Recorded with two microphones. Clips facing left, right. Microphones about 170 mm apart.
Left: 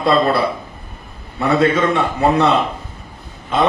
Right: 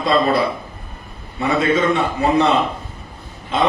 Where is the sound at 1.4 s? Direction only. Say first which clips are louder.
Left 2 dB; 65° left (ahead or behind).